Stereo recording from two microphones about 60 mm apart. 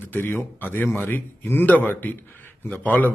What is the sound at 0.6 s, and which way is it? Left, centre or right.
A man's voice, left.